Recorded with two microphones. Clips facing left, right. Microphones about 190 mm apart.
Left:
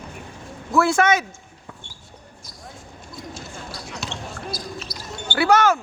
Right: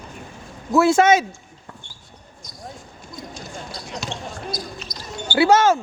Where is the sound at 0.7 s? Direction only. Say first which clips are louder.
Right 3 dB; 25° right (ahead or behind).